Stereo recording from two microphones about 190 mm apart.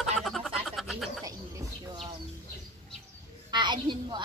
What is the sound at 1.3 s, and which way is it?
Music, 20° right (ahead or behind).